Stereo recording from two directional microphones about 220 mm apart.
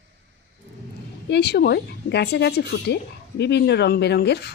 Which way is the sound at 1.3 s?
50° left (ahead or behind).